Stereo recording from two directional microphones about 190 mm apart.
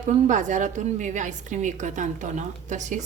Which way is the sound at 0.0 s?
40° right (ahead or behind).